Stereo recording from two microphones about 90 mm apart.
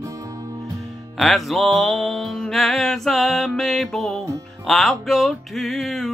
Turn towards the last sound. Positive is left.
turn(degrees=0)  # may be behind; listen again after turning